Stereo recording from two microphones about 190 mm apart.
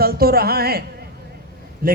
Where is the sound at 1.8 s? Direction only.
50° right (ahead or behind).